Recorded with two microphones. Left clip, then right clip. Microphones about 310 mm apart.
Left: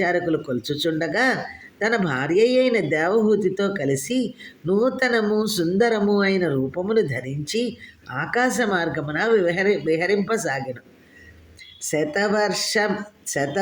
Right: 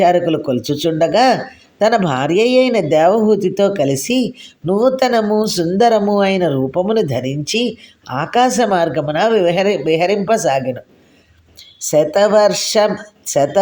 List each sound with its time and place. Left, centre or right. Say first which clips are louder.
0.0 s speech: right 9 dB; centre
11.9 s speech: right 10 dB; centre